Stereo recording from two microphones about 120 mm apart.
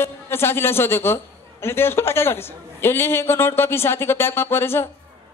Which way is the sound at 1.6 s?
20° left (ahead or behind).